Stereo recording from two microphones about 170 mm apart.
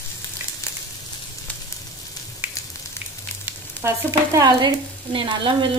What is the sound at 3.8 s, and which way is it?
Stir, 20° right (ahead or behind).